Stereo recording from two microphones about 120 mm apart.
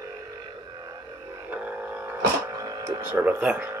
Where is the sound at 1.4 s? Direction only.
15° right (ahead or behind).